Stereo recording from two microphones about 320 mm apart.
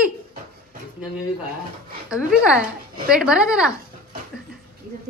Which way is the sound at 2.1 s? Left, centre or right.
Centre.